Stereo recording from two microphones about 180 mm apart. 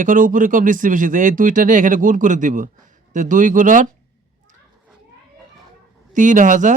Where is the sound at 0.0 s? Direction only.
45° right (ahead or behind).